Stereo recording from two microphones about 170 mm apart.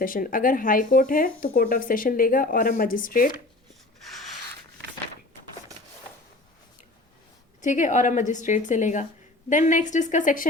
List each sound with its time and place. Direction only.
0.0 s speech: 55° left (ahead or behind)
7.6 s a woman's voice: 45° left (ahead or behind)